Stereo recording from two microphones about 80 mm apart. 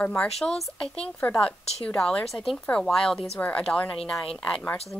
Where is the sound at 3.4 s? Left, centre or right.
Centre.